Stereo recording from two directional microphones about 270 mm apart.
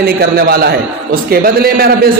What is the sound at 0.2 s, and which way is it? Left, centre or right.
A man's voice, right.